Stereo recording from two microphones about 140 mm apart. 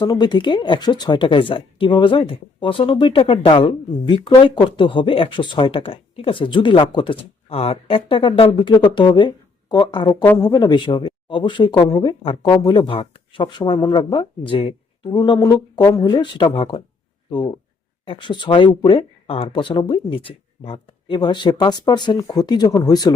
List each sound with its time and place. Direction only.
0.0 s speech: 30° left (ahead or behind)
18.0 s speech: 35° left (ahead or behind)